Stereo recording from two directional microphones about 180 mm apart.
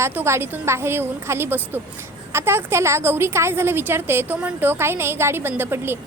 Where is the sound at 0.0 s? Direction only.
15° right (ahead or behind).